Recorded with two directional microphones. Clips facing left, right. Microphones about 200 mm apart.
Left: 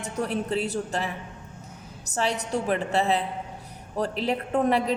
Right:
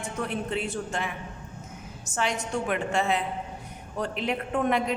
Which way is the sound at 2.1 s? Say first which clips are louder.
Left 2 dB; 35° left (ahead or behind).